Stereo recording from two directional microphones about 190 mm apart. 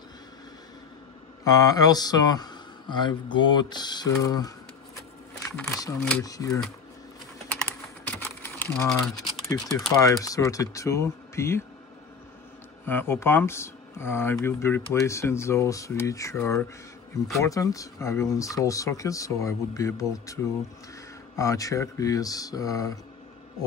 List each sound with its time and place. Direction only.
1.4 s speech: 20° left (ahead or behind)
5.6 s speech: 15° left (ahead or behind)
7.4 s typing: 5° left (ahead or behind)
9.5 s speech: 20° left (ahead or behind)
12.8 s speech: 10° left (ahead or behind)
21.4 s speech: 15° left (ahead or behind)